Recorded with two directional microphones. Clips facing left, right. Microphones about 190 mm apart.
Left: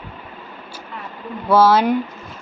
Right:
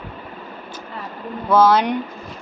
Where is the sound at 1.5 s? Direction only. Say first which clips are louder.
Left 1 dB; 5° left (ahead or behind).